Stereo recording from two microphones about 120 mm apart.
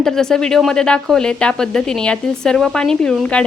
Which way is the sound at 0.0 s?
5° left (ahead or behind).